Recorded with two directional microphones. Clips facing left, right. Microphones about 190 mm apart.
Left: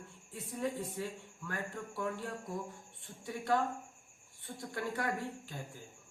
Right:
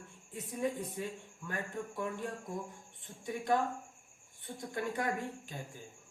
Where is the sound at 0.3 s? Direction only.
20° right (ahead or behind).